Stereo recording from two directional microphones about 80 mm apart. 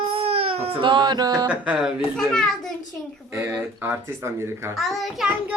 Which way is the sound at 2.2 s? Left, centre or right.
Centre.